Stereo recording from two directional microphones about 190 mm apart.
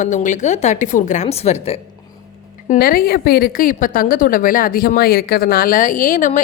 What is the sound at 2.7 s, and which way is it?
A woman's voice, 50° left (ahead or behind).